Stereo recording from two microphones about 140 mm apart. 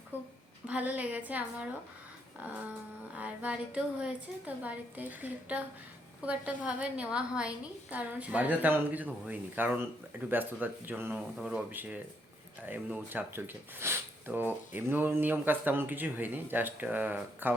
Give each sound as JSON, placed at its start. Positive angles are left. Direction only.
{"t": 0.1, "sound": "a woman's voice", "side_deg": 15}
{"t": 0.7, "sound": "a woman's voice", "side_deg": -10}
{"t": 3.2, "sound": "a woman's voice", "side_deg": -10}